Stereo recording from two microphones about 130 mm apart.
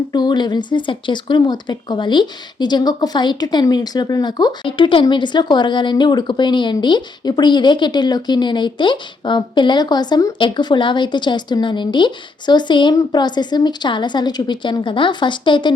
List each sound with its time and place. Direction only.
0.1 s speech: 35° left (ahead or behind)